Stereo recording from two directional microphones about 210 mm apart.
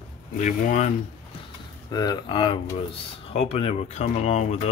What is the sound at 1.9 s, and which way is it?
Speech, 20° left (ahead or behind).